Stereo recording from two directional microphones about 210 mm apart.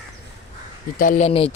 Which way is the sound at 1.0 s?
40° left (ahead or behind).